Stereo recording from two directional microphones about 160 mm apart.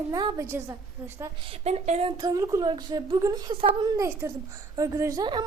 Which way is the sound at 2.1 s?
20° right (ahead or behind).